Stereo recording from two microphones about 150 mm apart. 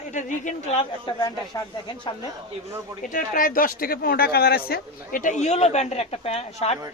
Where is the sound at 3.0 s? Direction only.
65° left (ahead or behind); by 6.8 s 45° left (ahead or behind).